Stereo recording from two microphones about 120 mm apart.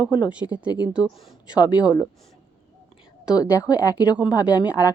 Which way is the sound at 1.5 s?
35° left (ahead or behind).